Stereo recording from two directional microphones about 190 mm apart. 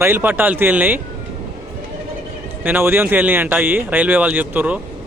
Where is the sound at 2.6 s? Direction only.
10° right (ahead or behind).